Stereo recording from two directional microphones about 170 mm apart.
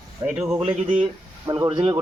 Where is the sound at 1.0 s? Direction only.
30° right (ahead or behind).